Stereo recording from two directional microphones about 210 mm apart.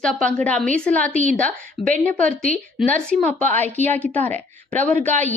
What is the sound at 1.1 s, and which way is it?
Speech, 35° right (ahead or behind).